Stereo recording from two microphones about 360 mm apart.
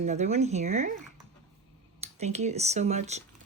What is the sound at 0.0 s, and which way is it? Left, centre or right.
Speech, centre.